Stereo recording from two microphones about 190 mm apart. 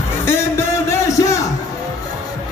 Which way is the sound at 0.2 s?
15° left (ahead or behind).